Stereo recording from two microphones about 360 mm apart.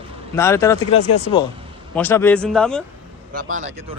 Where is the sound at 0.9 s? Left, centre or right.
Left.